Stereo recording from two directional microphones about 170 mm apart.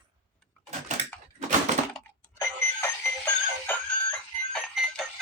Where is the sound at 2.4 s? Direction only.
15° left (ahead or behind).